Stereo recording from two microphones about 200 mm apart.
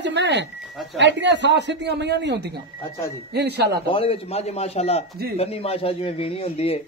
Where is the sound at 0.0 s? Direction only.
60° right (ahead or behind).